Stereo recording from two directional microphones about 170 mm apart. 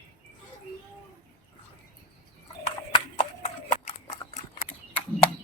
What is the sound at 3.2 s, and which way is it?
Horse, 45° left (ahead or behind).